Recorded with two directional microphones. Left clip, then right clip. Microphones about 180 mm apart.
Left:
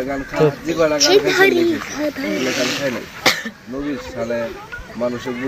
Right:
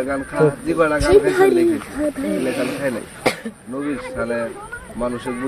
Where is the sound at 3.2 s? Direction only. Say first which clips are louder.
Left 4 dB; 45° right (ahead or behind).